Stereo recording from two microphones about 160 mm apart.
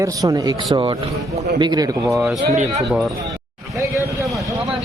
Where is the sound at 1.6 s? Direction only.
25° right (ahead or behind).